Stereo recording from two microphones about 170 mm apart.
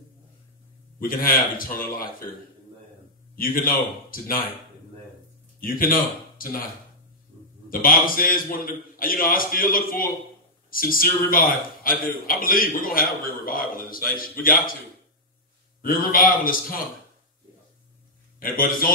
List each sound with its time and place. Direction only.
0.9 s a man's voice: 55° left (ahead or behind)
3.3 s a man's voice: 55° left (ahead or behind)
5.6 s speech: 55° left (ahead or behind)
7.8 s a man's voice: 55° left (ahead or behind)
15.8 s a man's voice: 55° left (ahead or behind)
18.4 s a man's voice: 55° left (ahead or behind)